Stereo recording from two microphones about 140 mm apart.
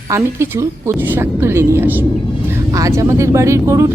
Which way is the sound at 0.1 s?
15° right (ahead or behind).